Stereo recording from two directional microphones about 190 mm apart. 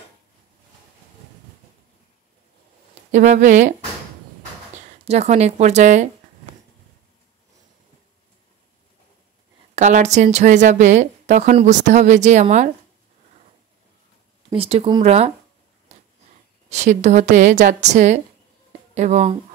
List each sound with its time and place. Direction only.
2.9 s speech: 40° right (ahead or behind)
5.0 s speech: 35° right (ahead or behind)
9.8 s speech: 40° right (ahead or behind)
14.5 s speech: 30° right (ahead or behind)
16.7 s speech: 40° right (ahead or behind)